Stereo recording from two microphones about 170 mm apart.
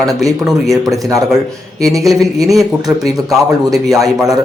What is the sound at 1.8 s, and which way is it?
Speech, 20° right (ahead or behind).